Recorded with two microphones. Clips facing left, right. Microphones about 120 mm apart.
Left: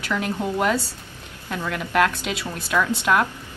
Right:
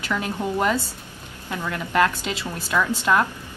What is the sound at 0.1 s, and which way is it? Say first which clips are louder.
Speech: left 1 dB; centre (ahead or behind).